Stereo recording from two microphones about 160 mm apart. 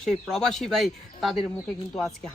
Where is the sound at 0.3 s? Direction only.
5° left (ahead or behind).